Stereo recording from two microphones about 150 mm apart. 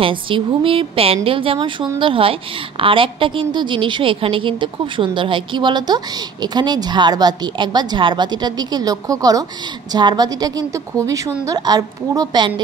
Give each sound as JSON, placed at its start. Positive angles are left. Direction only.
{"t": 0.0, "sound": "a woman's voice", "side_deg": -35}